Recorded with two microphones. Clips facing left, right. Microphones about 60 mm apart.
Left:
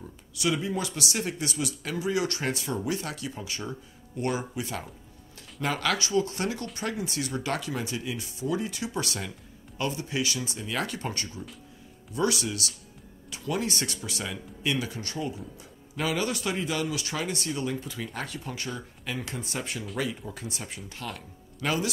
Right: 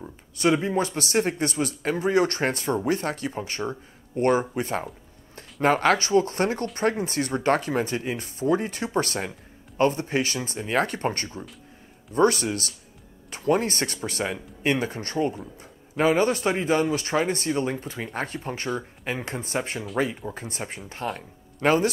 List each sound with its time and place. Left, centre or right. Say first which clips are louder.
0.4 s speech: right 6 dB; right